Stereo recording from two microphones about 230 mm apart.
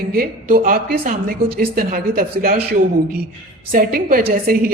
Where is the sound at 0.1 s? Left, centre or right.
Right.